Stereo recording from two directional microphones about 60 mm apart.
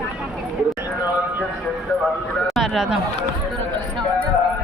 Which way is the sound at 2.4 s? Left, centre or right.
Centre.